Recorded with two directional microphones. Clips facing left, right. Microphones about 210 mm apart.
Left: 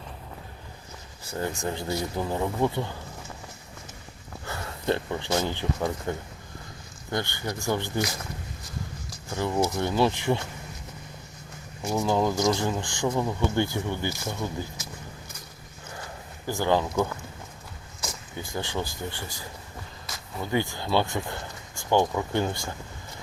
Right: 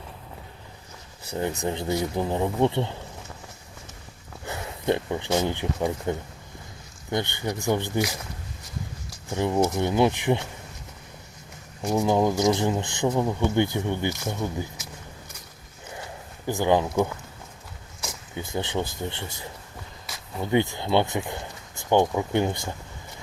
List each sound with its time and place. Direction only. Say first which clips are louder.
1.3 s speech: right 3 dB; 20° right (ahead or behind)
4.4 s speech: right 2 dB; 20° right (ahead or behind)
9.3 s speech: right 3 dB; 20° right (ahead or behind)
11.8 s speech: right 3 dB; 15° right (ahead or behind)
16.5 s speech: right 3 dB; 15° right (ahead or behind)
18.3 s speech: right 3 dB; 20° right (ahead or behind)
20.4 s speech: right 4 dB; 20° right (ahead or behind)